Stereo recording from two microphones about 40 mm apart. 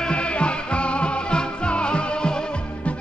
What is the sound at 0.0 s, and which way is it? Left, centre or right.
Music, left.